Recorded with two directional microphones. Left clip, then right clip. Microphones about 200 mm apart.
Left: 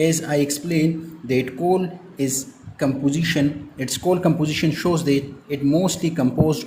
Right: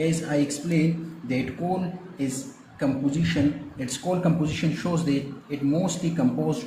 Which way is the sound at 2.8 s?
50° left (ahead or behind).